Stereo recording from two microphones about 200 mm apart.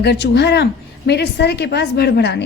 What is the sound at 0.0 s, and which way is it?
A woman's voice, 55° left (ahead or behind).